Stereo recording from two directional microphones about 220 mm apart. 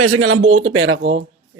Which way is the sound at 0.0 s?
75° right (ahead or behind).